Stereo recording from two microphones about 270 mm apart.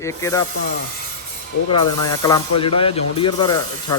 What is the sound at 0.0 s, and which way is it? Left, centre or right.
Speech, centre.